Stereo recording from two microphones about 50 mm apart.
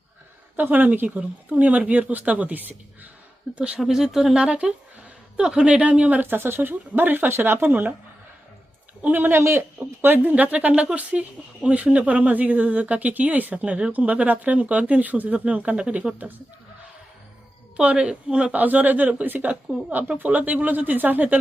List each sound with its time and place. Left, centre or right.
0.5 s speech: right
3.5 s speech: right
3.8 s speech: centre; by 6.2 s right
6.2 s speech: right
9.1 s speech: right
9.4 s speech: right
10.0 s speech: right
10.3 s speech: right
17.7 s speech: right
18.5 s speech: right